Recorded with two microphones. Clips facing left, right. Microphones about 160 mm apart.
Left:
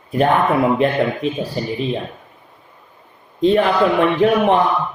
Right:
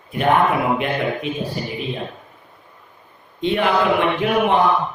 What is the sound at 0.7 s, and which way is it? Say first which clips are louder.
Speech: left 5 dB; 35° left (ahead or behind).